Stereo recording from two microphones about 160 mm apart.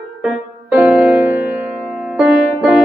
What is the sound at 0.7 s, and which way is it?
Music, 10° right (ahead or behind).